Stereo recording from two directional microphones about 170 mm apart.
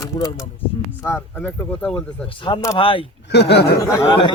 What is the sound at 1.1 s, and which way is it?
Speech, 10° left (ahead or behind).